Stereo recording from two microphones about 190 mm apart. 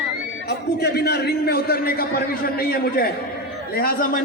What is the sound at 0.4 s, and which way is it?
A man's voice, 60° left (ahead or behind).